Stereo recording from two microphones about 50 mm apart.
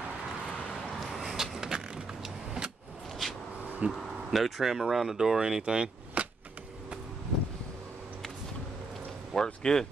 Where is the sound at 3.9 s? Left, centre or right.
Centre.